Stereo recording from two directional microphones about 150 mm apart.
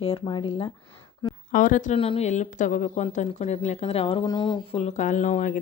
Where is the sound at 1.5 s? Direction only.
60° left (ahead or behind).